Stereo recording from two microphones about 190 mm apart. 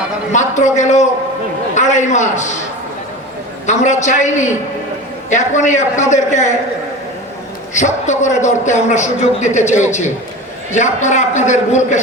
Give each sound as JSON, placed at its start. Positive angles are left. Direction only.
{"t": 0.3, "sound": "a man's voice", "side_deg": 40}
{"t": 3.7, "sound": "a man's voice", "side_deg": 40}
{"t": 7.7, "sound": "a man's voice", "side_deg": 40}